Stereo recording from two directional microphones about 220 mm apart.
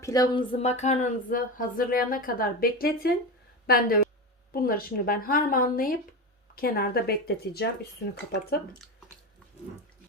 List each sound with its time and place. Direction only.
0.0 s speech: 15° left (ahead or behind)
0.6 s speech: 30° left (ahead or behind); by 7.7 s 45° left (ahead or behind)